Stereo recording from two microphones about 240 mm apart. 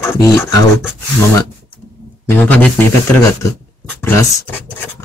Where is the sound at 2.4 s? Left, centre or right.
Centre.